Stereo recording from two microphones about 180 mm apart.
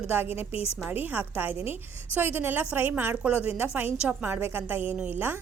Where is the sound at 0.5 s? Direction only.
35° left (ahead or behind).